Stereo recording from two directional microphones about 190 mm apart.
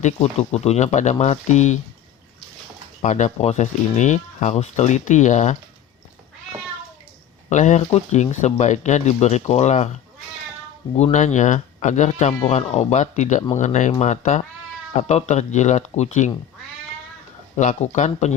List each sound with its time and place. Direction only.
0.0 s speech: 35° left (ahead or behind)
3.0 s speech: 40° left (ahead or behind)
7.5 s speech: 40° left (ahead or behind)
10.9 s speech: 35° left (ahead or behind)
17.6 s speech: 40° left (ahead or behind)